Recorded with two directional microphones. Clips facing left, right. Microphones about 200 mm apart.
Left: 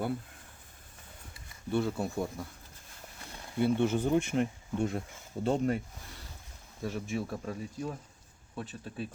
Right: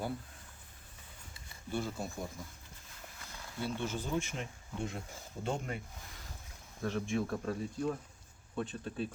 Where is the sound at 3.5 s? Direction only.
60° left (ahead or behind).